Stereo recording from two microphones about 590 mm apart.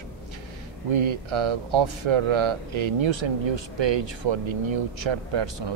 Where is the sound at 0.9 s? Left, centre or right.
Right.